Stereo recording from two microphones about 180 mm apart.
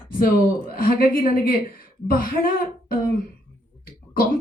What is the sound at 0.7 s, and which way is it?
A woman's voice, 55° left (ahead or behind).